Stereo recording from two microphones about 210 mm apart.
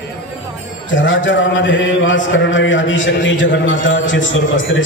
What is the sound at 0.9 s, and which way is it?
A man's voice, 65° left (ahead or behind).